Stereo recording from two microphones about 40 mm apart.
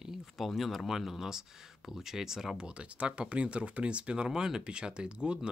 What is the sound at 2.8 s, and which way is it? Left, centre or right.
Speech, right.